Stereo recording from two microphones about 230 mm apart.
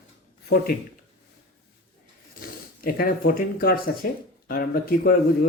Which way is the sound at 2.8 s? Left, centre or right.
Left.